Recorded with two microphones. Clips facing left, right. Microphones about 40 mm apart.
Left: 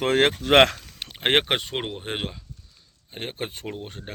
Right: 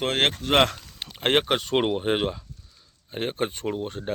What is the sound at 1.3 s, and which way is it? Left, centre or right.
Speech, left.